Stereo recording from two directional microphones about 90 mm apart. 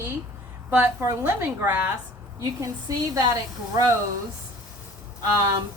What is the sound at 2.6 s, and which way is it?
Speech, 40° right (ahead or behind).